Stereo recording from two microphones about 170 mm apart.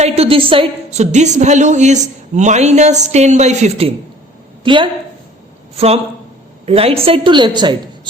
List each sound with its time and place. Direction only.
0.0 s a woman's voice: 35° right (ahead or behind)